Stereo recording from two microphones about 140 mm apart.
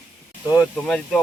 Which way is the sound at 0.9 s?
5° left (ahead or behind).